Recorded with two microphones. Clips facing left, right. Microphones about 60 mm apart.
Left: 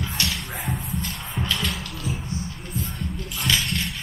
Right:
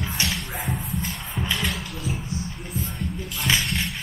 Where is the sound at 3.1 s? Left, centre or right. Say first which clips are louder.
Even; centre.